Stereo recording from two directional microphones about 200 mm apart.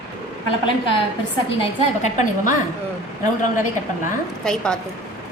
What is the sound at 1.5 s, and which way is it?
A woman's voice, 30° left (ahead or behind).